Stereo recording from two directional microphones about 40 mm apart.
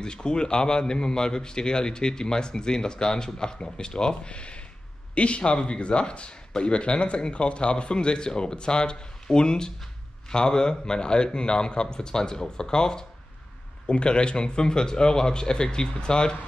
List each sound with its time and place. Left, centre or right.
0.0 s speech: left